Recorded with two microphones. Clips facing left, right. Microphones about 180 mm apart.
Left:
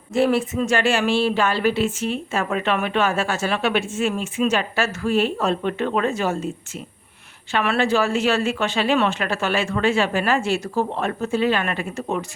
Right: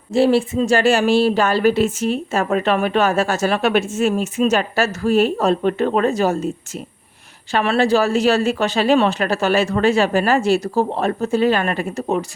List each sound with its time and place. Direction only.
0.1 s speech: 30° right (ahead or behind)